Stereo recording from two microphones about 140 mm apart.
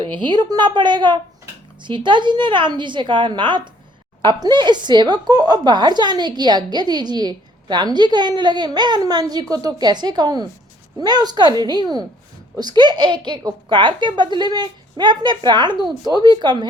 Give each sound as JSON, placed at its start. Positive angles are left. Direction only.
{"t": 0.0, "sound": "a woman's voice", "side_deg": -35}